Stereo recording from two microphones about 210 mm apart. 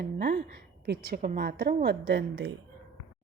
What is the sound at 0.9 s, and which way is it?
A woman's voice, 50° right (ahead or behind).